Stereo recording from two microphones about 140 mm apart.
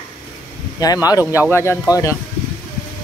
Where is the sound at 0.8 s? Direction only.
25° left (ahead or behind).